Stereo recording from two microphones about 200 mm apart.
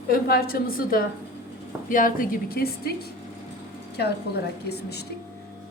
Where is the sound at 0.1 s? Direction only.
50° left (ahead or behind).